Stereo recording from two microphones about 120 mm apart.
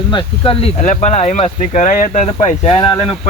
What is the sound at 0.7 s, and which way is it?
Speech, 85° left.